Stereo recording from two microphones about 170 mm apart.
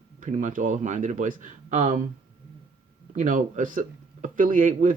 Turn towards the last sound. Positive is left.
turn(degrees=-50)  # may be behind; listen again after turning